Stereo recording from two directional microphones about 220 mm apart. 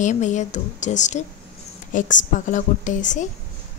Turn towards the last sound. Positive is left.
turn(degrees=35)  # may be behind; listen again after turning